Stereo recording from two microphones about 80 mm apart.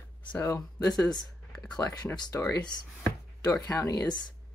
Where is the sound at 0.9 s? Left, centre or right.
Centre.